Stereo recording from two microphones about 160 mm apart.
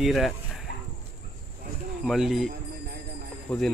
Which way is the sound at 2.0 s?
5° right (ahead or behind).